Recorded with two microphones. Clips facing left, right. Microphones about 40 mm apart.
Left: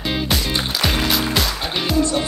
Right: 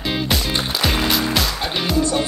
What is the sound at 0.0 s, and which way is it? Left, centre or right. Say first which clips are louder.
Music: even; centre.